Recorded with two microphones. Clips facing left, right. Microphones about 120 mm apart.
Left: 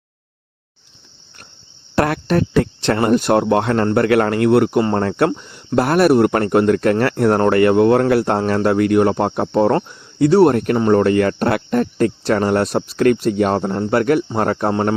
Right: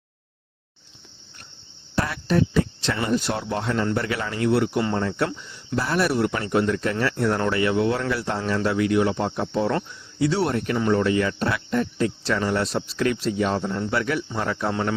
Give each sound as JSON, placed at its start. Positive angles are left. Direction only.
{"t": 2.0, "sound": "speech", "side_deg": 65}
{"t": 4.8, "sound": "speech", "side_deg": 45}
{"t": 5.0, "sound": "speech", "side_deg": 60}
{"t": 14.7, "sound": "speech", "side_deg": 40}